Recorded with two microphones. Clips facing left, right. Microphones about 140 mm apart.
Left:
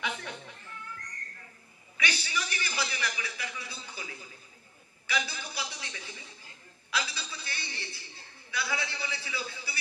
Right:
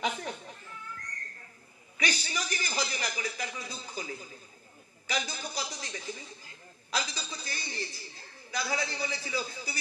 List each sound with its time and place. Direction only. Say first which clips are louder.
0.0 s cat: right 3 dB; 35° right (ahead or behind)
2.0 s a sound: even; 40° right (ahead or behind)
5.0 s a man's voice: even; 40° right (ahead or behind)
6.9 s chuckle: right 1 dB; 40° right (ahead or behind)
8.5 s a man's voice: right 2 dB; 40° right (ahead or behind)